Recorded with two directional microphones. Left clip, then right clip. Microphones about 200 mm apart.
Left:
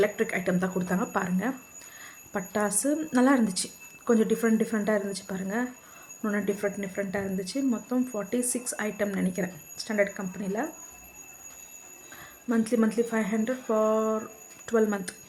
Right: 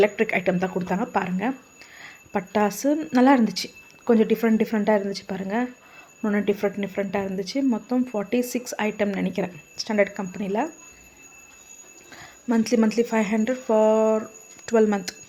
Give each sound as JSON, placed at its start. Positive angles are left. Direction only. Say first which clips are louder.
{"t": 0.0, "sound": "speech", "louder": "right 6 dB", "side_deg": -10}
{"t": 12.5, "sound": "speech", "louder": "right 4 dB", "side_deg": -15}